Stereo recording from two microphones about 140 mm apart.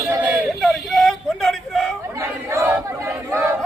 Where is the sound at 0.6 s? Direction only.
Centre (ahead or behind).